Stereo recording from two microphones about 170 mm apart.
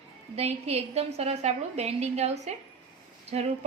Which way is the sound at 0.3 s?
35° right (ahead or behind).